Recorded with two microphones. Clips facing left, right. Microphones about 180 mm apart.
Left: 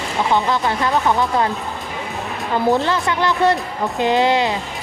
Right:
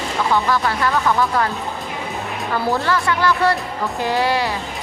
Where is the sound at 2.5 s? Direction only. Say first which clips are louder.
Left 3 dB; 20° left (ahead or behind).